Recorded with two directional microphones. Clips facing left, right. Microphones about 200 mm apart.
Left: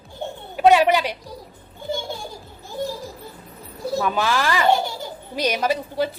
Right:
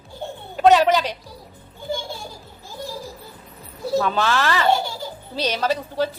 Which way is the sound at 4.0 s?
10° left (ahead or behind).